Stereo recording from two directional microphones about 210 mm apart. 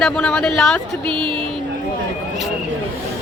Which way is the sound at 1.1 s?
25° right (ahead or behind).